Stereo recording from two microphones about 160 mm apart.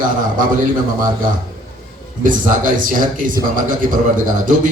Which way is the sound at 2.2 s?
55° right (ahead or behind).